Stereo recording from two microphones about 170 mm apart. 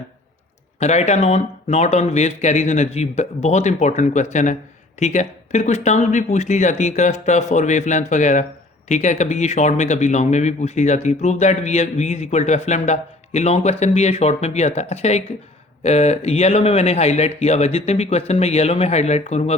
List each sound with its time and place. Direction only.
0.8 s speech: 40° left (ahead or behind)